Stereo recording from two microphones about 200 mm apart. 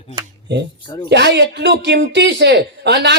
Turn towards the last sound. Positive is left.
turn(degrees=-60)  # may be behind; listen again after turning